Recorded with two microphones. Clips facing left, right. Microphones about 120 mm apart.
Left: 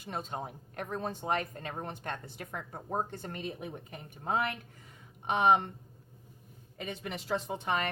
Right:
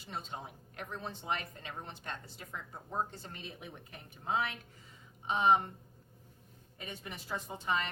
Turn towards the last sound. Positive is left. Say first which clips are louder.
# left 3 dB
turn(degrees=60)  # may be behind; listen again after turning